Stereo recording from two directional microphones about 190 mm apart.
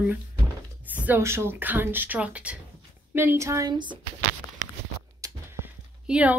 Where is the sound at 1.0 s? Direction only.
10° right (ahead or behind).